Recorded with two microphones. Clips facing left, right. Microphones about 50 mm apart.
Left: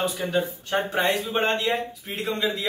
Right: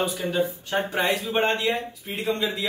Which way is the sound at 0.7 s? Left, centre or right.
Centre.